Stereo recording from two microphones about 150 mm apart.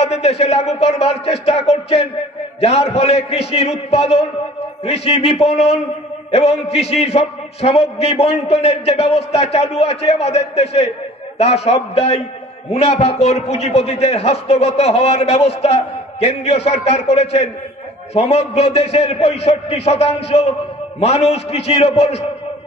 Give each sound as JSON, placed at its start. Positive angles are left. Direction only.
{"t": 0.0, "sound": "a man's voice", "side_deg": 45}
{"t": 5.4, "sound": "a man's voice", "side_deg": -5}
{"t": 6.6, "sound": "a man's voice", "side_deg": 45}